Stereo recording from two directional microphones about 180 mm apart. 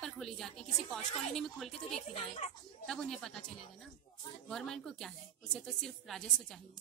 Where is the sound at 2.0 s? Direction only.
35° left (ahead or behind).